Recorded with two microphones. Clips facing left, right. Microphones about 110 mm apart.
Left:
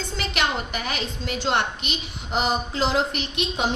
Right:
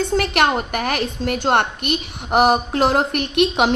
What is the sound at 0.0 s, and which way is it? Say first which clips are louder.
A woman's voice: right 9 dB; 60° right (ahead or behind).